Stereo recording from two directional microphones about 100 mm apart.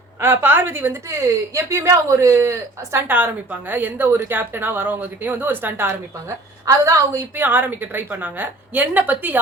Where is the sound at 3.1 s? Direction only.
20° right (ahead or behind); by 7.2 s 35° right (ahead or behind).